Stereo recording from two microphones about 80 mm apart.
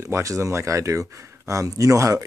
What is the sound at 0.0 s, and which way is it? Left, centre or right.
Speech, right.